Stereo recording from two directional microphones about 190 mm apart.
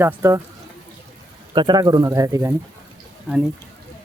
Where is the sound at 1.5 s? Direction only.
25° right (ahead or behind).